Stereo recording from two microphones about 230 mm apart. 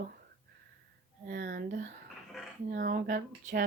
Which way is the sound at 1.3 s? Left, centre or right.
Right.